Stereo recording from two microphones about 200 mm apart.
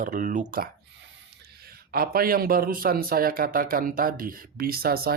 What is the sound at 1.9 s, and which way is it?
A man's voice, 50° right (ahead or behind).